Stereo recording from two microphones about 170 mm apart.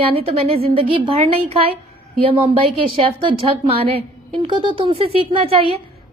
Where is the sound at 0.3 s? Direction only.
35° right (ahead or behind).